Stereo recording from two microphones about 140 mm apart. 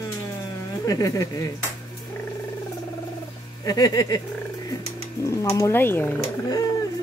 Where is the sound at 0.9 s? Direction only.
25° left (ahead or behind).